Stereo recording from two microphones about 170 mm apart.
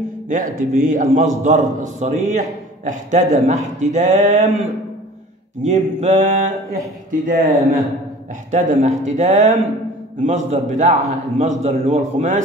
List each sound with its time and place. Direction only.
0.3 s a man's voice: 50° right (ahead or behind)
7.1 s a man's voice: 50° right (ahead or behind)